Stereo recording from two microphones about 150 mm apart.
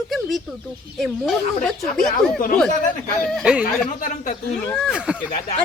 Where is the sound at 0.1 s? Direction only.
Centre (ahead or behind).